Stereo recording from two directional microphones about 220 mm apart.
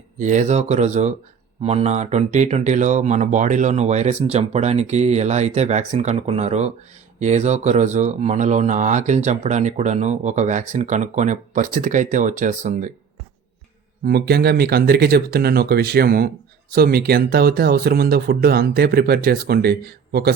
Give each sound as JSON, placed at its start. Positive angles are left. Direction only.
{"t": 0.2, "sound": "speech", "side_deg": -35}
{"t": 14.0, "sound": "speech", "side_deg": -45}